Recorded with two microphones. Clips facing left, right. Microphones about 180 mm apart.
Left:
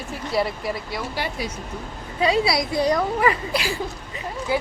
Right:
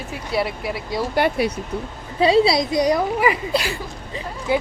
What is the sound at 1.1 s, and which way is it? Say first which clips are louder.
Speech: right 12 dB; 60° right (ahead or behind).